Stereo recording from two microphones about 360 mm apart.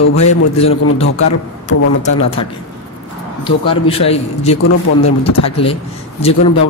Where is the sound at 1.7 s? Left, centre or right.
Left.